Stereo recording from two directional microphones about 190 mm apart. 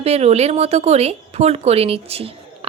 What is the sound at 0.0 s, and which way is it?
A woman's voice, 35° right (ahead or behind).